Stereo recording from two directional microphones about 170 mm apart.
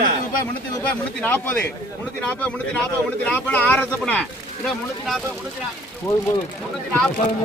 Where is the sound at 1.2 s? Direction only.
10° left (ahead or behind).